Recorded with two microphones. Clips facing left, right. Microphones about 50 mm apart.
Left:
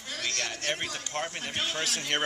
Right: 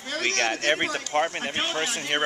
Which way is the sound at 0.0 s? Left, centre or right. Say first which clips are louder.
Right 8 dB; right.